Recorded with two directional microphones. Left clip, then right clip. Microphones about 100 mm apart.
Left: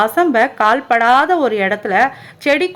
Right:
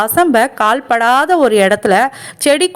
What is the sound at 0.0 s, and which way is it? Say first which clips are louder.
A woman's voice: right 2 dB; 40° right (ahead or behind).